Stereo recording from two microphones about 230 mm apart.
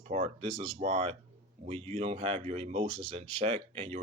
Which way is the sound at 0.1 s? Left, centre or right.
Right.